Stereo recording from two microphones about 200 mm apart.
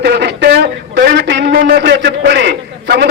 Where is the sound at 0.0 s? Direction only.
55° right (ahead or behind).